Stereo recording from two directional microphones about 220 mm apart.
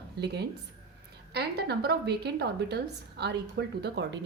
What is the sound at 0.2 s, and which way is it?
Speech, 50° right (ahead or behind).